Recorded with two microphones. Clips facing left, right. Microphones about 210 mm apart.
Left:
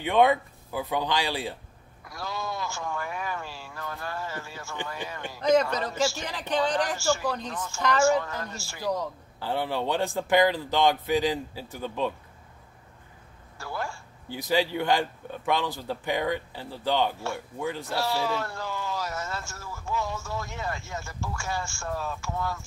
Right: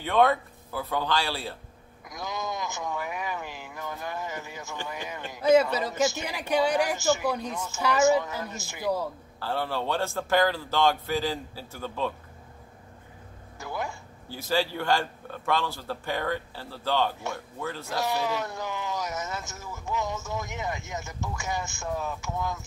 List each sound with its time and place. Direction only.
0.0 s a man's voice: 15° left (ahead or behind)
2.0 s speech: 20° right (ahead or behind)
9.4 s a man's voice: 15° left (ahead or behind)
13.6 s a sound: 20° right (ahead or behind)
14.3 s a man's voice: 15° left (ahead or behind)
17.9 s speech: 20° right (ahead or behind)